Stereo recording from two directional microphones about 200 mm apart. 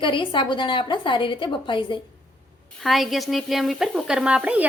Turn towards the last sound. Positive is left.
turn(degrees=-5)  # may be behind; listen again after turning